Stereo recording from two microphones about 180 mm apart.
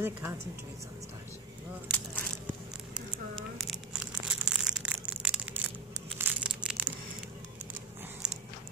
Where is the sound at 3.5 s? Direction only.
Centre (ahead or behind).